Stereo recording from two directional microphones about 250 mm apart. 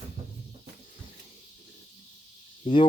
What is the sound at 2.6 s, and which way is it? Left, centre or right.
Speech, centre.